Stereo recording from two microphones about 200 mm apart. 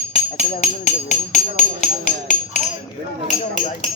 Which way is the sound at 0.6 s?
35° left (ahead or behind).